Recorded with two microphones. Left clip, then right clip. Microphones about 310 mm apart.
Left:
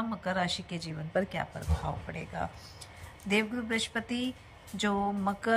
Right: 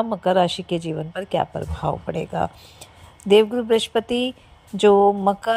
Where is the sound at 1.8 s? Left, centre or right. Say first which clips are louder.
Right 14 dB; right.